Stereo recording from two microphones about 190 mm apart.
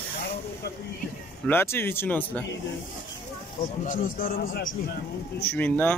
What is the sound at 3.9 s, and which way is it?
Speech, 45° left (ahead or behind).